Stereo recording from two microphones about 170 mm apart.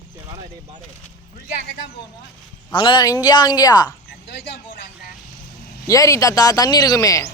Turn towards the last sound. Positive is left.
turn(degrees=20)  # may be behind; listen again after turning